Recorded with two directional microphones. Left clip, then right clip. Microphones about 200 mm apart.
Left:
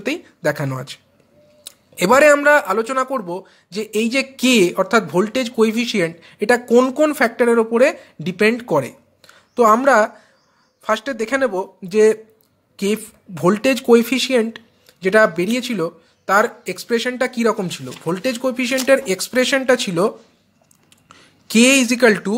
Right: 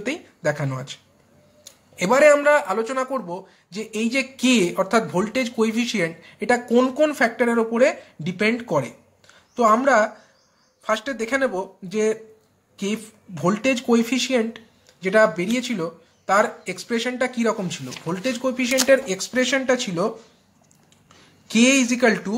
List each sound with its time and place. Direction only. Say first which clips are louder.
0.0 s speech: left 4 dB; 35° left (ahead or behind)